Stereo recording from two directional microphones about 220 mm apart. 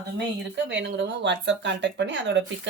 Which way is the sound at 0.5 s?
50° right (ahead or behind).